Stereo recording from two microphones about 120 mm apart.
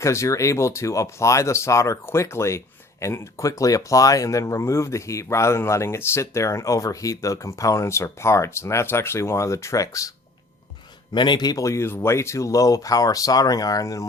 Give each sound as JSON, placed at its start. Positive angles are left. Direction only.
{"t": 0.0, "sound": "speech", "side_deg": 25}
{"t": 11.1, "sound": "speech", "side_deg": 40}